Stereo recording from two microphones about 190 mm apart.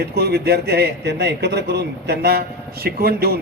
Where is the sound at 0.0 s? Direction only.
55° right (ahead or behind).